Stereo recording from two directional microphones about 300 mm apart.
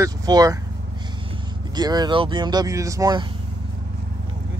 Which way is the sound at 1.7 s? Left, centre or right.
Centre.